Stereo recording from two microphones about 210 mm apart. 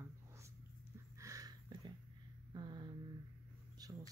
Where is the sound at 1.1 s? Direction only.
15° right (ahead or behind).